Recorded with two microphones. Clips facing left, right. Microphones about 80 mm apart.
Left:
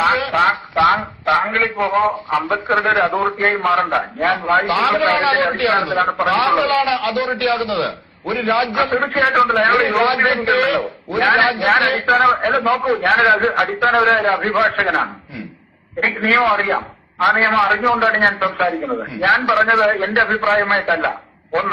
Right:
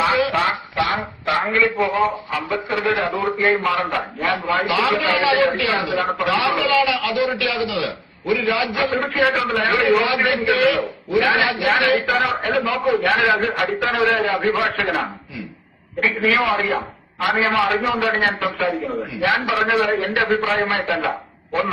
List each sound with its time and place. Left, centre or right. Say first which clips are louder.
0.0 s a man's voice: left 3 dB; left
16.0 s a man's voice: left 2 dB; left